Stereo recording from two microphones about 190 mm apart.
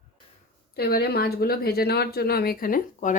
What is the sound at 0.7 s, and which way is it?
Speech, 55° left (ahead or behind).